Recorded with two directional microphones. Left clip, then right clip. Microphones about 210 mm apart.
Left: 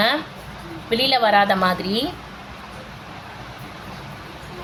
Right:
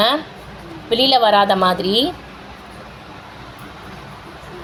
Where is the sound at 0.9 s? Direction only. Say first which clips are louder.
Right 4 dB; 15° right (ahead or behind).